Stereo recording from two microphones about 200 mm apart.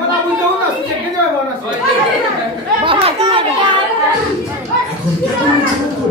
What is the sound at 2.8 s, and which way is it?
Children playing, 25° right (ahead or behind).